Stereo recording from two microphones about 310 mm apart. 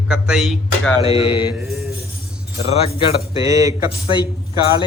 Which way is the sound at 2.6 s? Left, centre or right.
Centre.